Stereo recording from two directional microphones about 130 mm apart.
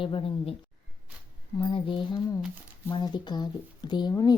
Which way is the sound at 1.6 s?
40° left (ahead or behind).